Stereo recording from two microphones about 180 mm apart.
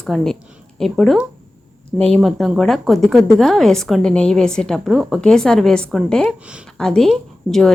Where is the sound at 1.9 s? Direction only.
35° right (ahead or behind).